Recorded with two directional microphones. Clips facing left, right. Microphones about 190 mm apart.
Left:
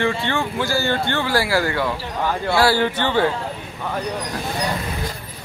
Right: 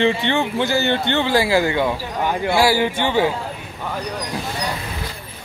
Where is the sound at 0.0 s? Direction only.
20° right (ahead or behind).